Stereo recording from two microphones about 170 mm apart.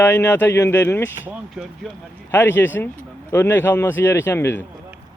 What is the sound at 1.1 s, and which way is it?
Speech, 10° right (ahead or behind).